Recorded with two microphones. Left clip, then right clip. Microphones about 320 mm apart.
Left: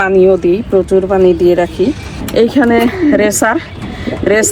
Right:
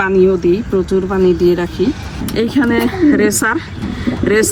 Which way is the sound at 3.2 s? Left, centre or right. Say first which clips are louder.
Left 3 dB; centre.